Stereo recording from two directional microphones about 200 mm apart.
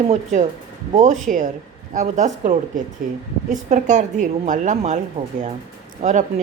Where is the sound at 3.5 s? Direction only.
40° right (ahead or behind).